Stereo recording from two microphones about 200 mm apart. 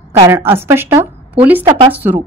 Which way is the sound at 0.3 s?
10° right (ahead or behind).